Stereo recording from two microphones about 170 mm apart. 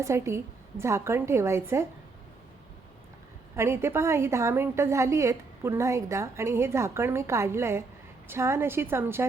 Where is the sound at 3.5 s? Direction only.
15° right (ahead or behind).